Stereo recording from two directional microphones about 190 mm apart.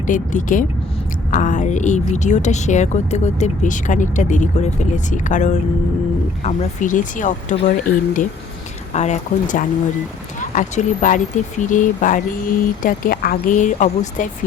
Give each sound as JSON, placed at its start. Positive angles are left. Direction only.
{"t": 0.1, "sound": "speech", "side_deg": 40}